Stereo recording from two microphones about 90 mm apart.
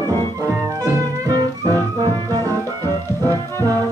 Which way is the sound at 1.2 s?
45° right (ahead or behind).